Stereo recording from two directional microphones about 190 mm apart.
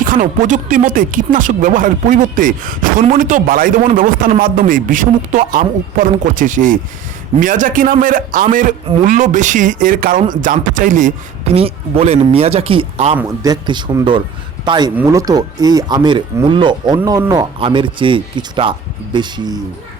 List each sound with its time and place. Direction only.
0.0 s speech: 45° right (ahead or behind)
13.1 s speech: 20° right (ahead or behind)